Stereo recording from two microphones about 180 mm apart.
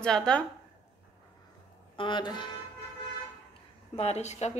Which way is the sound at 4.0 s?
35° left (ahead or behind).